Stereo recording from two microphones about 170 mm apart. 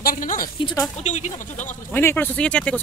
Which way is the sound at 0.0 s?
55° left (ahead or behind).